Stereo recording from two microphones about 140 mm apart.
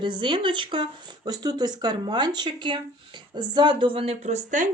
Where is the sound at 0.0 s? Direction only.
35° right (ahead or behind).